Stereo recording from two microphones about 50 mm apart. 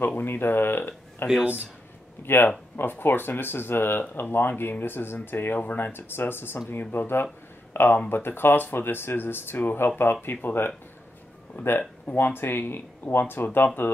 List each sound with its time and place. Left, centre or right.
0.0 s speech: left
1.4 s speech: right
2.2 s speech: left